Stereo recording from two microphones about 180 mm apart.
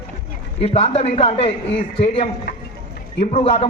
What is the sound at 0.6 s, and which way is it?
A man's voice, 35° left (ahead or behind).